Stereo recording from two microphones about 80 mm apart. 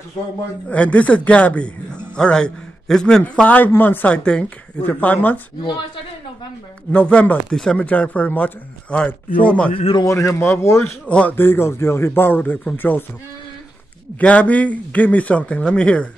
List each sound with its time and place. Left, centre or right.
0.7 s a man's voice: centre
3.4 s speech: left
6.9 s a man's voice: centre
10.0 s speech: left
11.1 s a man's voice: centre
11.3 s speech: left
14.2 s a man's voice: centre